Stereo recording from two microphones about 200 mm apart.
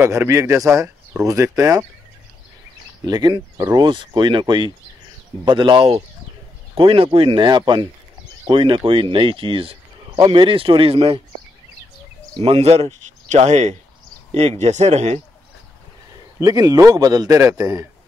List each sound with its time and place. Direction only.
0.0 s a man's voice: 15° right (ahead or behind)
3.1 s speech: 20° right (ahead or behind)
12.4 s speech: 30° right (ahead or behind)
16.3 s a man's voice: 20° right (ahead or behind)